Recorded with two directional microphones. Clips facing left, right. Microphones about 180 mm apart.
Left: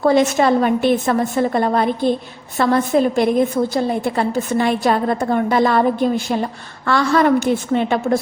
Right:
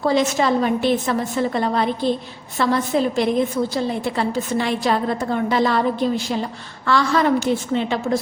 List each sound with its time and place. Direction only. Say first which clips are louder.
0.0 s a woman's voice: left 4 dB; 55° left (ahead or behind)